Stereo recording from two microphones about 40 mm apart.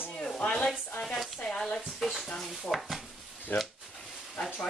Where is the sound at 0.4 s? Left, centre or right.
Left.